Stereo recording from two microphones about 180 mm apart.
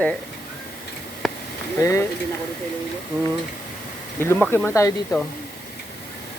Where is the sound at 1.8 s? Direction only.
15° left (ahead or behind).